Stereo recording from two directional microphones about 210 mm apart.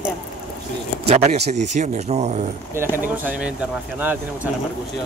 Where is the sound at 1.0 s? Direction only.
30° right (ahead or behind).